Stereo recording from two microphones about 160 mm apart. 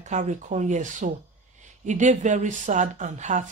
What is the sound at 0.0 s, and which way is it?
Speech, 50° right (ahead or behind).